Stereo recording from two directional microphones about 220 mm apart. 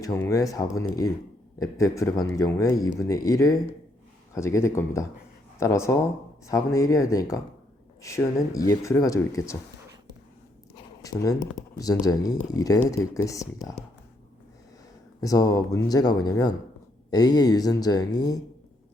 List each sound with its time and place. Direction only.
0.0 s speech: 15° left (ahead or behind)
11.0 s speech: 15° left (ahead or behind)
15.2 s speech: 15° left (ahead or behind)